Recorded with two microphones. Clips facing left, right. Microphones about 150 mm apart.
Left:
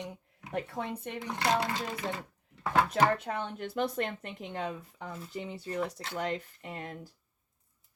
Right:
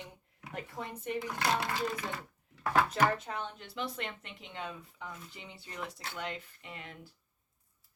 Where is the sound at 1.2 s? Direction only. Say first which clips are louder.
Left 2 dB; 20° left (ahead or behind).